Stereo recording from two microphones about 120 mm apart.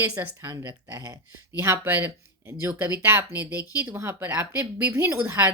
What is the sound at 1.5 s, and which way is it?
A woman's voice, 20° right (ahead or behind).